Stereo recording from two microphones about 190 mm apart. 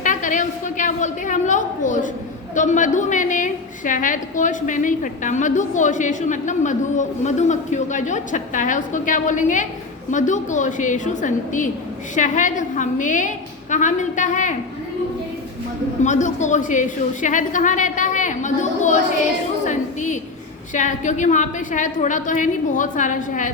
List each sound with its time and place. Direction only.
0.0 s a woman's voice: 40° left (ahead or behind)
16.0 s a woman's voice: 40° left (ahead or behind)
19.6 s a sound: 40° left (ahead or behind)
20.7 s a woman's voice: 40° left (ahead or behind)